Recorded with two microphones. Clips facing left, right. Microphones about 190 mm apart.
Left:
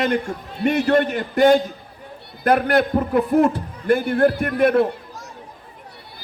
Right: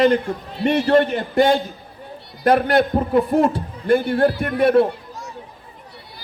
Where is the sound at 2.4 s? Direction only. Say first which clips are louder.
Right 1 dB; 55° left (ahead or behind).